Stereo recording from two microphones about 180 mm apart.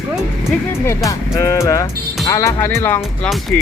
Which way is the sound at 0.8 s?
15° left (ahead or behind).